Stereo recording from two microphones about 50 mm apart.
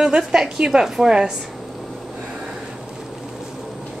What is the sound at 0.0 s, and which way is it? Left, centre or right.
A woman's voice, centre.